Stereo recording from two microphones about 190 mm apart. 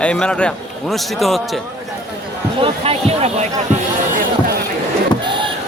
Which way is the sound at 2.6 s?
30° right (ahead or behind).